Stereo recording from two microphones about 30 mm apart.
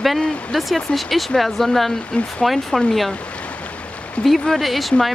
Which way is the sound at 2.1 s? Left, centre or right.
Left.